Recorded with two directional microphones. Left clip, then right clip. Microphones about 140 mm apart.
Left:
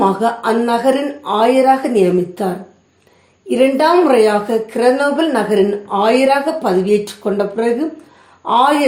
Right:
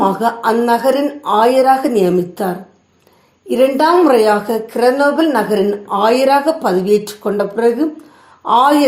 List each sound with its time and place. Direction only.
0.0 s a woman's voice: 35° right (ahead or behind)